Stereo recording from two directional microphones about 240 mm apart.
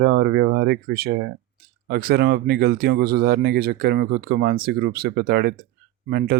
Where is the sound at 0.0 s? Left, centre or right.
Right.